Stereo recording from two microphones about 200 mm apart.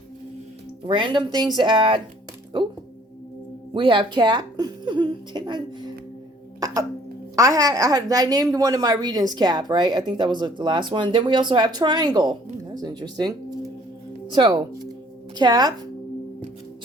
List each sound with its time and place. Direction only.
0.9 s a woman's voice: 25° right (ahead or behind)
3.8 s a woman's voice: 25° right (ahead or behind)
7.3 s a woman's voice: 15° right (ahead or behind)
14.3 s a woman's voice: 20° right (ahead or behind)